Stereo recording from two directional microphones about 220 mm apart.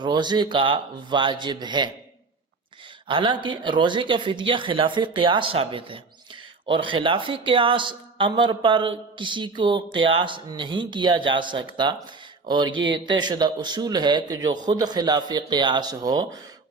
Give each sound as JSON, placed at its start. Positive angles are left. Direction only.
{"t": 0.0, "sound": "speech", "side_deg": -20}
{"t": 3.1, "sound": "speech", "side_deg": -20}